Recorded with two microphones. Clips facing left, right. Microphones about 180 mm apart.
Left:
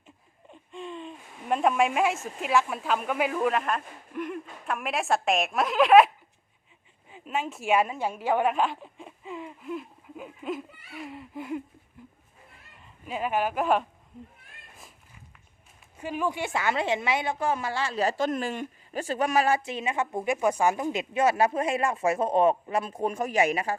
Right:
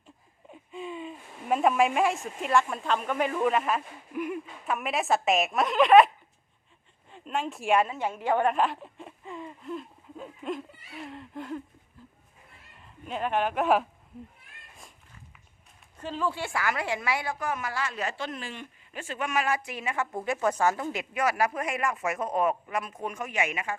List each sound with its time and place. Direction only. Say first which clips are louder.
0.5 s speech: right 1 dB; 5° right (ahead or behind)
7.1 s speech: even; 5° left (ahead or behind)
12.8 s speech: even; 5° left (ahead or behind)
16.0 s a woman's voice: left 2 dB; 15° left (ahead or behind); by 23.7 s 35° left (ahead or behind)